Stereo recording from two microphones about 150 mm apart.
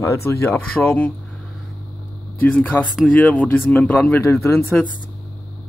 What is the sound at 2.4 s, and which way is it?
Speech, 10° left (ahead or behind).